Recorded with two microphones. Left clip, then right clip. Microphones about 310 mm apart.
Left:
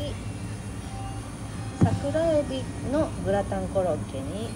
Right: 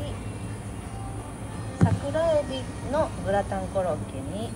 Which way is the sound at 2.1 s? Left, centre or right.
Centre.